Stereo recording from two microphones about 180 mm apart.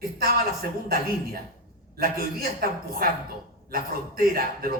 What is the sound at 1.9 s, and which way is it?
A man's voice, 55° right (ahead or behind).